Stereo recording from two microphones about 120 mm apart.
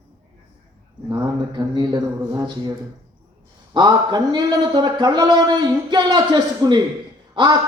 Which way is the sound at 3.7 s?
40° right (ahead or behind).